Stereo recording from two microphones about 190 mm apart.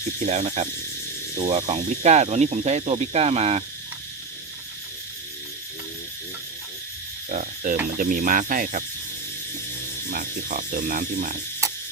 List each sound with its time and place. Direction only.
0.2 s speech: 35° right (ahead or behind)
7.3 s cricket: 40° right (ahead or behind)
7.9 s frog: 45° right (ahead or behind)
10.1 s frog: 45° right (ahead or behind)